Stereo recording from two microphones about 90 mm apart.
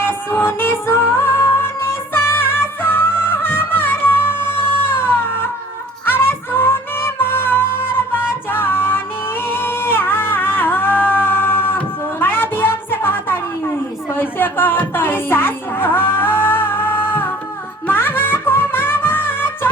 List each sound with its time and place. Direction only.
0.0 s music: 25° left (ahead or behind)
12.2 s a sound: 25° left (ahead or behind)
14.2 s music: 25° left (ahead or behind)